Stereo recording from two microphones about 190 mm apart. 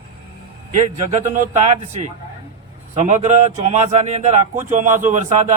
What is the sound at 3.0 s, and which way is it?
Speech, 40° right (ahead or behind).